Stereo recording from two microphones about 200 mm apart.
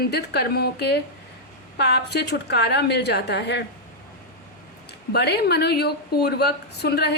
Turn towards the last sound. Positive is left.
turn(degrees=55)  # may be behind; listen again after turning